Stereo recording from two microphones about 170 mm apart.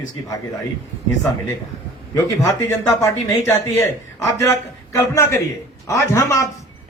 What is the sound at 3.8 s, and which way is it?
A man's voice, 15° left (ahead or behind).